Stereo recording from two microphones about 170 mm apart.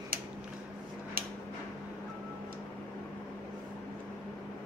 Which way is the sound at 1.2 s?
60° right (ahead or behind).